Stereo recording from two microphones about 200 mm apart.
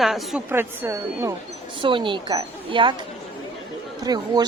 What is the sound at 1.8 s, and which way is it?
Speech, 25° right (ahead or behind).